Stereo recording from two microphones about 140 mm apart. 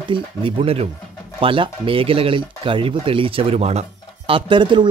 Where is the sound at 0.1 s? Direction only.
40° right (ahead or behind).